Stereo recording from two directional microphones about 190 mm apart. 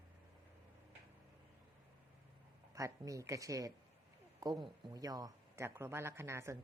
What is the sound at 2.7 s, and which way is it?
Speech, 15° right (ahead or behind).